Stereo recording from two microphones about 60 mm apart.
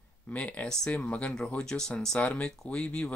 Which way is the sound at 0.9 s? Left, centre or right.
Left.